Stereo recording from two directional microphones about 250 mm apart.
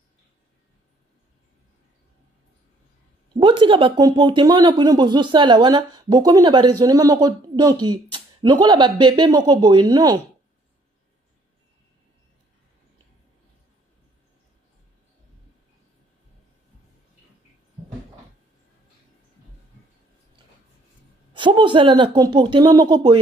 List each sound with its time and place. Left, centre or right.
3.3 s speech: centre
21.3 s speech: centre